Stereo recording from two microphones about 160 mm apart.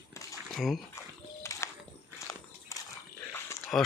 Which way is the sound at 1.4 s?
20° left (ahead or behind).